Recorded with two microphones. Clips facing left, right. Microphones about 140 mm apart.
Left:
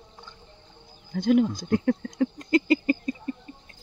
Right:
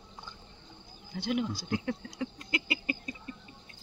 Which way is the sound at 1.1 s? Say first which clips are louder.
Left 10 dB; 45° left (ahead or behind).